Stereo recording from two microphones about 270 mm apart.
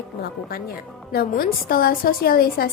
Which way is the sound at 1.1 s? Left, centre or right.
Left.